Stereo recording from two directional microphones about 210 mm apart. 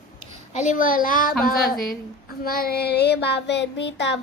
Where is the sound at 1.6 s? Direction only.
45° left (ahead or behind).